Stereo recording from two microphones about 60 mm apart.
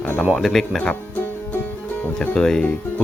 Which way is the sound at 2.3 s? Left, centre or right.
Centre.